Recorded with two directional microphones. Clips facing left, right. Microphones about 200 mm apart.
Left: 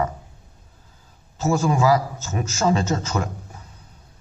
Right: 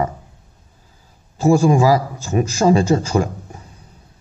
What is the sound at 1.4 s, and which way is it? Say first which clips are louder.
A man's voice: right 7 dB; 15° right (ahead or behind).